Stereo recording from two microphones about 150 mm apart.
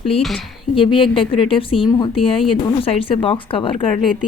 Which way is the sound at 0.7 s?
35° left (ahead or behind).